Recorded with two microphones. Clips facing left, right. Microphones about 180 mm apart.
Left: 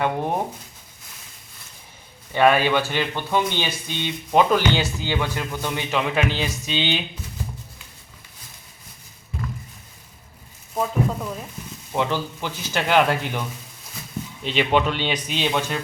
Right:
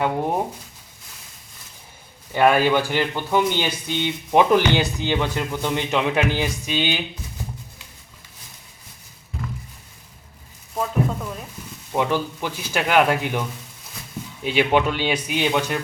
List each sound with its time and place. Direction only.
2.3 s speech: 10° right (ahead or behind)
10.8 s speech: 5° left (ahead or behind)
11.9 s speech: 15° right (ahead or behind)
14.4 s speech: 10° right (ahead or behind)